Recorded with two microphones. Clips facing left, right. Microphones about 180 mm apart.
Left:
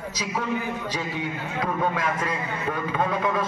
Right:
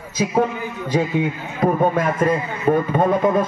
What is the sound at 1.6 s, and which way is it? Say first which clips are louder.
Speech: right 9 dB; 50° right (ahead or behind).